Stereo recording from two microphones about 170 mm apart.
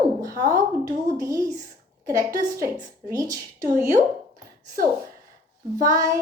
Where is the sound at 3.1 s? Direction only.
20° right (ahead or behind).